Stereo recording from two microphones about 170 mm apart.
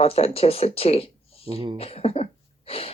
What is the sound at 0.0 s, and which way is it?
Speech, 35° left (ahead or behind).